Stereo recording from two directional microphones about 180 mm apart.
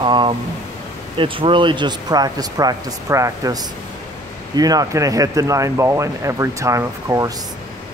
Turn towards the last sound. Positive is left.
turn(degrees=-20)  # may be behind; listen again after turning